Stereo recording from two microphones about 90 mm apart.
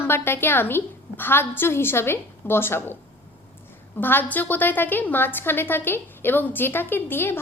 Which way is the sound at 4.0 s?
20° left (ahead or behind).